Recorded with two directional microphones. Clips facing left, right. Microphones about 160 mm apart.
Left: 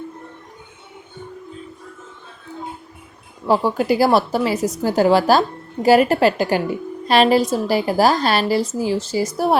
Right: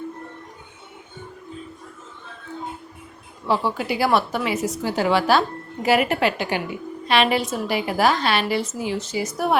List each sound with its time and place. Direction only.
3.4 s a woman's voice: 45° left (ahead or behind)